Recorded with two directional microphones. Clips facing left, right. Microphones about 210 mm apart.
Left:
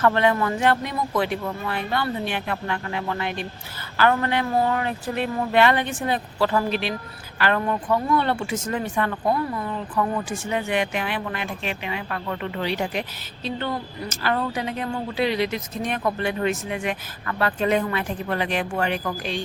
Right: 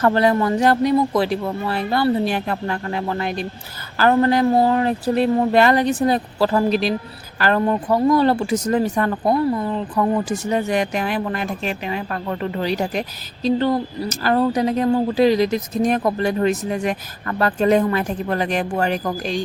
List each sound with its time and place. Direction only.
0.0 s speech: 35° right (ahead or behind)